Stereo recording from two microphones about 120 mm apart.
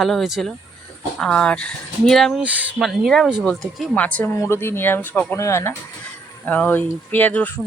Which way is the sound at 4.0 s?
10° left (ahead or behind).